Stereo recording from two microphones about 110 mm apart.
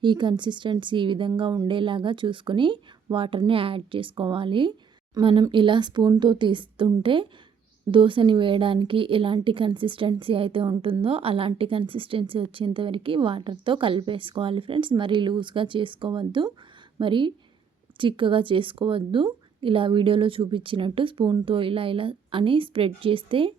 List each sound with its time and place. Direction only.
0.0 s speech: 45° right (ahead or behind)